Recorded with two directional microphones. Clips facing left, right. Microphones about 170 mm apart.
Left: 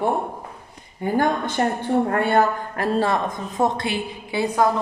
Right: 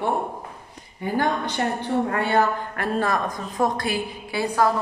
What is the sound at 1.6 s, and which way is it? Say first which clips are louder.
Speech: left 4 dB; 40° left (ahead or behind).